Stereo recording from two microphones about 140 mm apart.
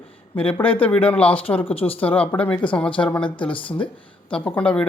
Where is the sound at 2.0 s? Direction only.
10° left (ahead or behind).